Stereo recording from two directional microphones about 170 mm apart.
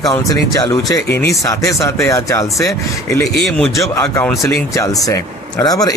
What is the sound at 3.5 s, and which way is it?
Speech, centre (ahead or behind).